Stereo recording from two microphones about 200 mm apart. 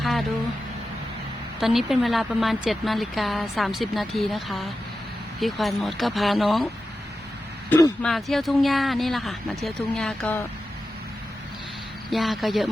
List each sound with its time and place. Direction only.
0.0 s a sound: centre (ahead or behind)
1.5 s a woman's voice: centre (ahead or behind)
7.7 s speech: 15° left (ahead or behind)
8.0 s a woman's voice: centre (ahead or behind)
12.1 s a woman's voice: centre (ahead or behind)